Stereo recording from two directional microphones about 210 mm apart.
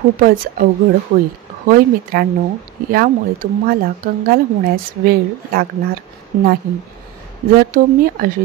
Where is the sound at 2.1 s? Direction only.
45° right (ahead or behind).